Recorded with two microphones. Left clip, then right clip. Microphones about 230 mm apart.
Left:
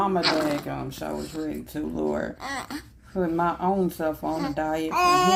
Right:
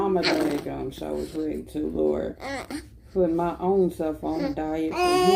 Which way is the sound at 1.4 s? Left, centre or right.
Left.